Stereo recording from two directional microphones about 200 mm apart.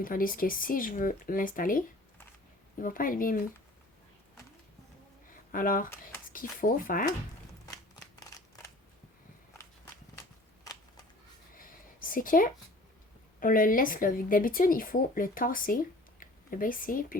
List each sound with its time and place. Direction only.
0.0 s speech: 45° left (ahead or behind)
2.8 s speech: 45° left (ahead or behind)
5.5 s speech: 45° left (ahead or behind)
7.7 s shuffling cards: 15° left (ahead or behind)
11.5 s a sound: 45° left (ahead or behind)
13.4 s speech: 45° left (ahead or behind)